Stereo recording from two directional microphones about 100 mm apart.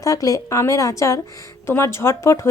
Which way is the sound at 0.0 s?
35° left (ahead or behind).